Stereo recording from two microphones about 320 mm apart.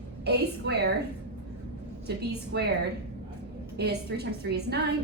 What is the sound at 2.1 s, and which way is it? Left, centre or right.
Speech, right.